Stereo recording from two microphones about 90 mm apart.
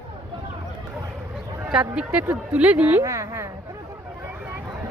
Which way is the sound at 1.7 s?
10° right (ahead or behind).